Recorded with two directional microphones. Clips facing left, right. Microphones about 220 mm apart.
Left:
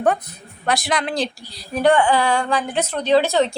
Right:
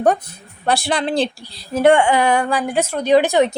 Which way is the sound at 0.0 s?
35° right (ahead or behind).